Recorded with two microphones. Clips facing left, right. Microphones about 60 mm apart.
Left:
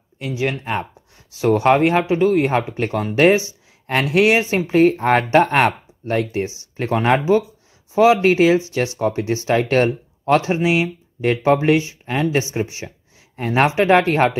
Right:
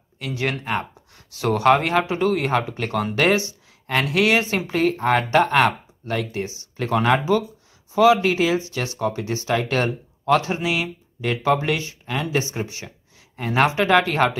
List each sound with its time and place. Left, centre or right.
0.3 s speech: centre
2.4 s speech: left
3.8 s speech: left
5.0 s speech: left
9.0 s speech: left
12.6 s speech: left